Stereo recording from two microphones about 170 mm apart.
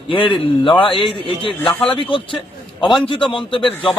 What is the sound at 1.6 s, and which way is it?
Speech, 10° left (ahead or behind).